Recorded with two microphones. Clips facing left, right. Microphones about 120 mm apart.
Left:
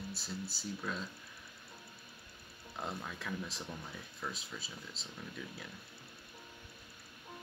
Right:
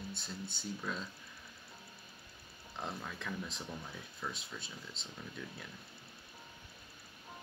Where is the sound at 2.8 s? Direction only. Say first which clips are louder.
Even; centre (ahead or behind).